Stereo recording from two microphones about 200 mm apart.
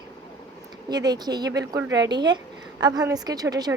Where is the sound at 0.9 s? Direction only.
20° right (ahead or behind).